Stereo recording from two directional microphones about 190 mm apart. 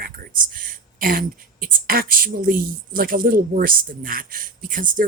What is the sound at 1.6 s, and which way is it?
A woman's voice, 50° right (ahead or behind).